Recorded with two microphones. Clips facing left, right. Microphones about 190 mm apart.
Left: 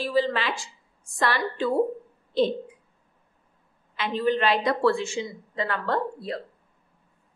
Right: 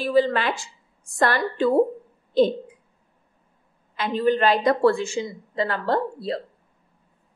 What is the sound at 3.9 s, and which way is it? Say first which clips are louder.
A woman's voice: right 3 dB; 45° right (ahead or behind).